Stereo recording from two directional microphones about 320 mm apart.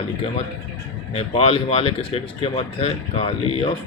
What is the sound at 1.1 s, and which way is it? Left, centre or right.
Speech, centre.